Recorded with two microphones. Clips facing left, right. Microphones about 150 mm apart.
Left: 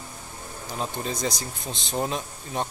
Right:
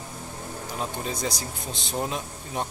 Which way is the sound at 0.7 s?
5° right (ahead or behind).